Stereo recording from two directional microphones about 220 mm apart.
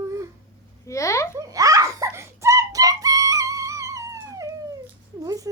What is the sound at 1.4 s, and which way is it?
Chicken, 15° right (ahead or behind).